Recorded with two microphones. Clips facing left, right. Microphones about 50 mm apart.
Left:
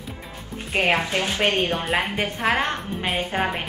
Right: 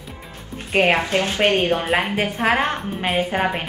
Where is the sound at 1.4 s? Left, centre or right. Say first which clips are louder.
Right 4 dB; right.